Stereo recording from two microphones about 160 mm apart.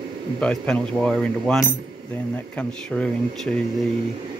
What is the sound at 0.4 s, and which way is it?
Speech, 5° left (ahead or behind).